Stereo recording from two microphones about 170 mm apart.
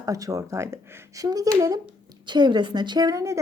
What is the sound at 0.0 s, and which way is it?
A woman's voice, 20° right (ahead or behind).